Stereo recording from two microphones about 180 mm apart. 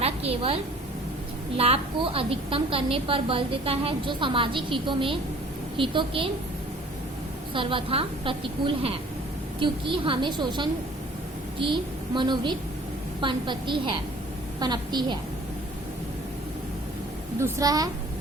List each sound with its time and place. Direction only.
0.0 s a sound: 35° right (ahead or behind)
1.5 s a woman's voice: 35° right (ahead or behind)
7.5 s a woman's voice: 30° right (ahead or behind)
17.4 s a woman's voice: 20° right (ahead or behind)